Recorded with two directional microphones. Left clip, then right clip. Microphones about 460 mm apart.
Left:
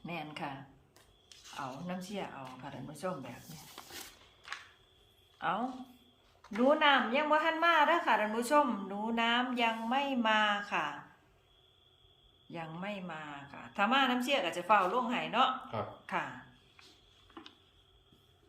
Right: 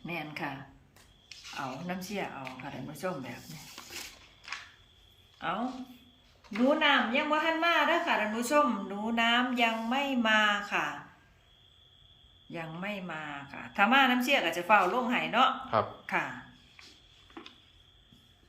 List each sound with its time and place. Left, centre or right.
0.0 s a sound: centre
1.5 s a woman's voice: centre
5.4 s a woman's voice: centre
12.5 s a woman's voice: centre